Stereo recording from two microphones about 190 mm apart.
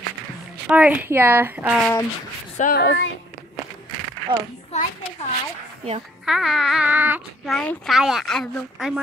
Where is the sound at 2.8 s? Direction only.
60° left (ahead or behind).